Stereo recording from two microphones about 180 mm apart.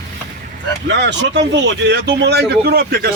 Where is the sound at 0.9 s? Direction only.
80° right.